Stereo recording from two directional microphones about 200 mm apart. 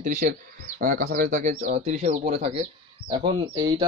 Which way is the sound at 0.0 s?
40° right (ahead or behind).